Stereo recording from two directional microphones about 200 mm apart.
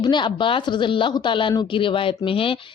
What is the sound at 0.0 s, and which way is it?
Speech, 20° left (ahead or behind).